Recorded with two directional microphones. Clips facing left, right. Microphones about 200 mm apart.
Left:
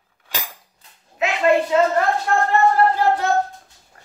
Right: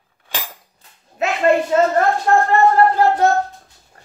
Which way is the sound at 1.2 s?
45° right (ahead or behind).